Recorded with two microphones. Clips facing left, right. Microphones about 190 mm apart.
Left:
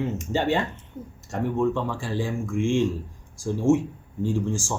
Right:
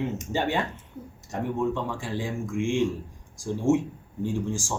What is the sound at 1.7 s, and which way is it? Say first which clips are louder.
Speech: left 3 dB; 15° right (ahead or behind).